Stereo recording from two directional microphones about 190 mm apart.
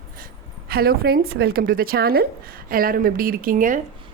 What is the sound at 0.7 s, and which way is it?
A woman's voice, 55° right (ahead or behind).